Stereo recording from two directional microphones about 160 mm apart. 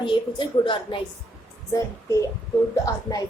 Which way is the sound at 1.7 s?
20° left (ahead or behind).